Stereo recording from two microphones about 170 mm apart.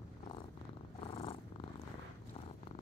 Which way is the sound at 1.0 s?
35° left (ahead or behind).